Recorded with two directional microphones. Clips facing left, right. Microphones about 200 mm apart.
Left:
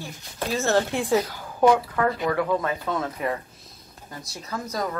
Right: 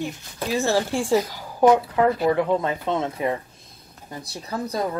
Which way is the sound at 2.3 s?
25° right (ahead or behind).